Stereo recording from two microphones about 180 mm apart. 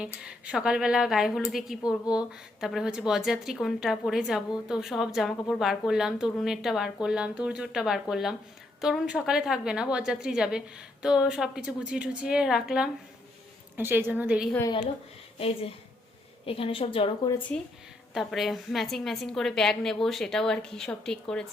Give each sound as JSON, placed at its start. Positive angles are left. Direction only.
{"t": 0.0, "sound": "a woman's voice", "side_deg": -5}
{"t": 15.4, "sound": "a woman's voice", "side_deg": 35}
{"t": 18.1, "sound": "a woman's voice", "side_deg": 0}